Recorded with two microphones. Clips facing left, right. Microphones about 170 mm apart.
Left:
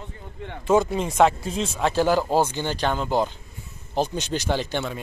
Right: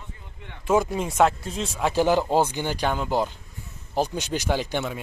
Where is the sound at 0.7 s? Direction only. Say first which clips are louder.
Left 2 dB; 5° right (ahead or behind).